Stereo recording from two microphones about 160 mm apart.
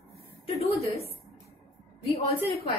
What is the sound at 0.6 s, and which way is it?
Speech, 40° left (ahead or behind).